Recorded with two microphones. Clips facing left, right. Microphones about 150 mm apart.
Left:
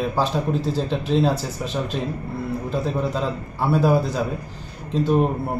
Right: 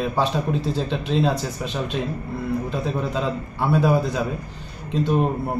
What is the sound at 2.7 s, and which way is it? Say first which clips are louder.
Speech: left 2 dB; centre (ahead or behind).